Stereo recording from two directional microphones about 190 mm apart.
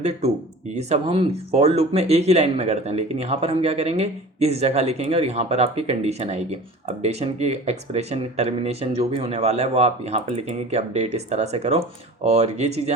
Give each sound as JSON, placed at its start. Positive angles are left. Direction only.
{"t": 0.7, "sound": "speech", "side_deg": -35}